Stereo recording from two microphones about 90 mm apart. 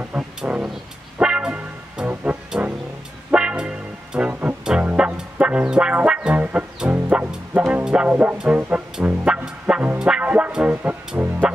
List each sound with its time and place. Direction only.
0.0 s speech: 15° right (ahead or behind)
1.1 s music: 10° right (ahead or behind)
8.4 s speech: 15° right (ahead or behind)
9.0 s music: 10° right (ahead or behind)